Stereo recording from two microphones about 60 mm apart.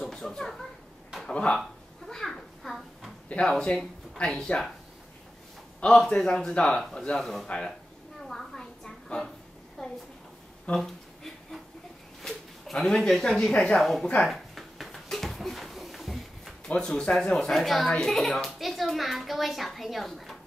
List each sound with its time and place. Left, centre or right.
0.0 s speech: centre
1.2 s speech: centre
2.0 s a sound: centre
3.3 s speech: centre
5.8 s a child's voice: centre
8.3 s a sound: centre
12.2 s speech: centre
13.7 s a child's voice: centre
14.2 s a sound: centre
16.6 s a child's voice: centre